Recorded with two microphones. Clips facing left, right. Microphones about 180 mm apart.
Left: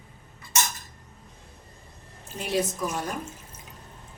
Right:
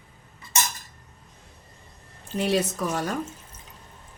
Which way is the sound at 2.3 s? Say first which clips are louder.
Right 5 dB; 70° right (ahead or behind).